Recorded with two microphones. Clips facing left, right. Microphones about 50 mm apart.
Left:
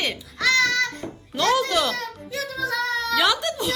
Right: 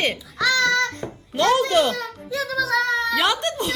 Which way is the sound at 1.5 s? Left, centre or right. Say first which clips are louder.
Right 3 dB; right.